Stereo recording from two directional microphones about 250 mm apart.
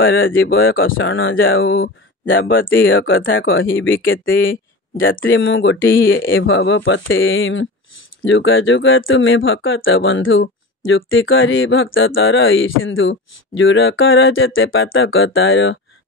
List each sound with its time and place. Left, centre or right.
0.0 s speech: left